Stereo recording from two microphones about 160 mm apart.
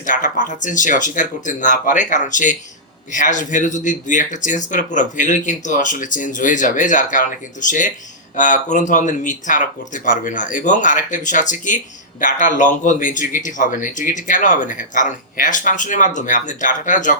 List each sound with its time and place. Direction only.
0.0 s speech: 55° left (ahead or behind)